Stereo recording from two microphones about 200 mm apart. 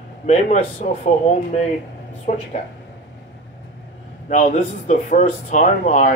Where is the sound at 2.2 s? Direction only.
35° left (ahead or behind).